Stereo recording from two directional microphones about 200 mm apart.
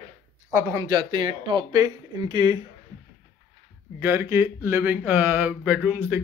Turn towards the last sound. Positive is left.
turn(degrees=-10)  # may be behind; listen again after turning